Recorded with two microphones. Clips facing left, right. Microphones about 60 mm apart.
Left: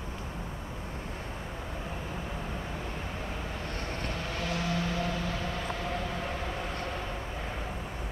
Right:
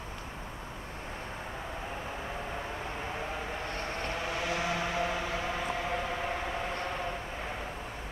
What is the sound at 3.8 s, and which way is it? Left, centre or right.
Vehicle, centre.